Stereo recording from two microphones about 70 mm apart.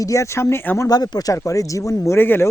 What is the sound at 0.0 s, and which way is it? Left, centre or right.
Speech, left.